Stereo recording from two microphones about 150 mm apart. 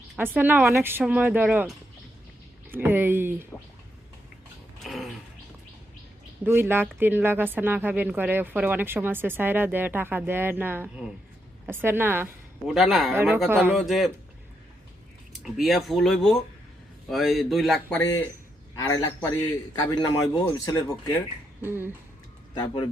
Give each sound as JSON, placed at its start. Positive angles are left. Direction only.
{"t": 0.2, "sound": "speech", "side_deg": -10}
{"t": 2.6, "sound": "speech", "side_deg": -15}
{"t": 4.8, "sound": "a sound", "side_deg": 0}
{"t": 6.4, "sound": "speech", "side_deg": -15}
{"t": 12.6, "sound": "speech", "side_deg": 0}
{"t": 13.1, "sound": "speech", "side_deg": -15}
{"t": 13.7, "sound": "speech", "side_deg": 0}
{"t": 15.4, "sound": "speech", "side_deg": 0}
{"t": 18.8, "sound": "speech", "side_deg": 25}
{"t": 21.6, "sound": "speech", "side_deg": -15}